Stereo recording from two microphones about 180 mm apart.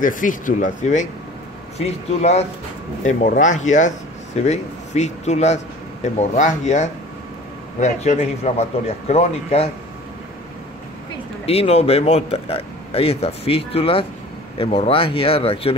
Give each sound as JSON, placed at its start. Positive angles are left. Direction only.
{"t": 0.0, "sound": "speech", "side_deg": 45}
{"t": 11.4, "sound": "speech", "side_deg": 35}